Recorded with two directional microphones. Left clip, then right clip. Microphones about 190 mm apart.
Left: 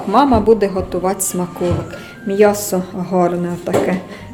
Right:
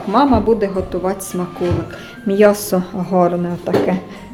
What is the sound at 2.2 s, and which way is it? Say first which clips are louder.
A woman's voice: right 1 dB; 20° right (ahead or behind).